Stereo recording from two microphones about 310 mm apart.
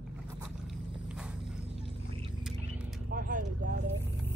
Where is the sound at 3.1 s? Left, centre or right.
Right.